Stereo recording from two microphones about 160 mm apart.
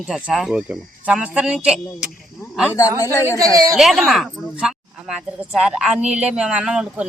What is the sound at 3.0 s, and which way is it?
Speech, 20° left (ahead or behind).